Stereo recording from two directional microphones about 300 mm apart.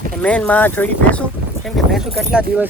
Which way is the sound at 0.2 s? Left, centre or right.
Centre.